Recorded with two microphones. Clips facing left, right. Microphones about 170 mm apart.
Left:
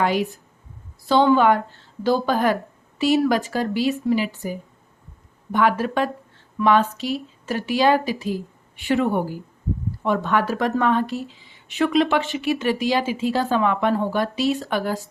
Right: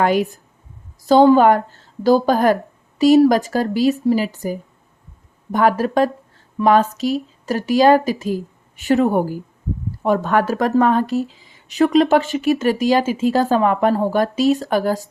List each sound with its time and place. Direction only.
0.0 s speech: 45° right (ahead or behind)